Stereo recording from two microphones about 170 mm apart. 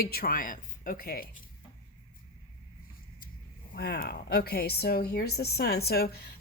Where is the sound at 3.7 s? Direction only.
70° left (ahead or behind).